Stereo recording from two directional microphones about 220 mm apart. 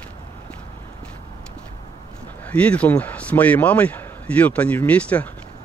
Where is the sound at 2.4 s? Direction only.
5° left (ahead or behind).